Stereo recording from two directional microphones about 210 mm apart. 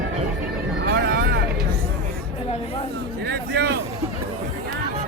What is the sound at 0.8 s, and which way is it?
Vehicle, 50° right (ahead or behind).